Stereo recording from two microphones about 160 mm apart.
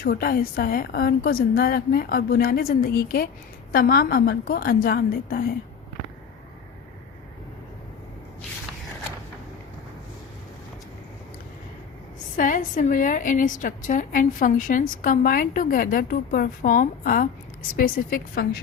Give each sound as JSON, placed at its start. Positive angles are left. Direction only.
{"t": 0.0, "sound": "a woman's voice", "side_deg": 70}
{"t": 12.4, "sound": "a woman's voice", "side_deg": 55}